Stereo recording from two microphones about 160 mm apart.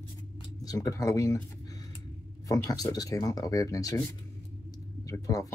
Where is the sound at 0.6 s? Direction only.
20° left (ahead or behind).